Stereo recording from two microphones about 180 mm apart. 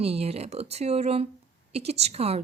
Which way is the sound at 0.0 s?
35° right (ahead or behind).